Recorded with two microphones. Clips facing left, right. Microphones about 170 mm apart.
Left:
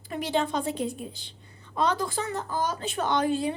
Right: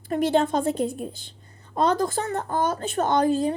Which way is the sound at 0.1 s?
50° right (ahead or behind).